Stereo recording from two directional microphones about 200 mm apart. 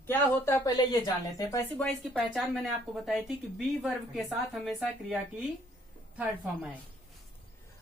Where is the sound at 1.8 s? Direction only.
5° left (ahead or behind).